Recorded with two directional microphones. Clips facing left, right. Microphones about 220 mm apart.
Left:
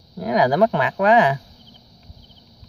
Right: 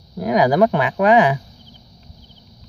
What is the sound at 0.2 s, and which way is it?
Speech, 10° right (ahead or behind).